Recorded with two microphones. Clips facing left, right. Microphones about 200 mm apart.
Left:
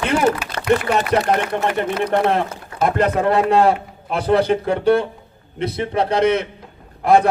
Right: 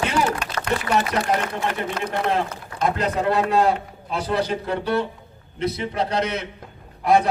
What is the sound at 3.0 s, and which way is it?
A man's voice, 55° left (ahead or behind).